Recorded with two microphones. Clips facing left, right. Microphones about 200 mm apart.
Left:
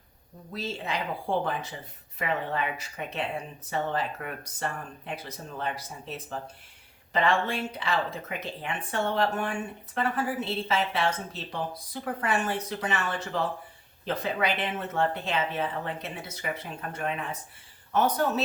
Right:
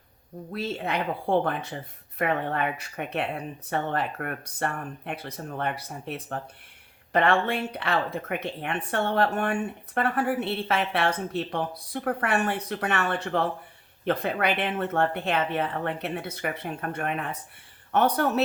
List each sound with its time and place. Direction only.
0.5 s speech: 60° right (ahead or behind)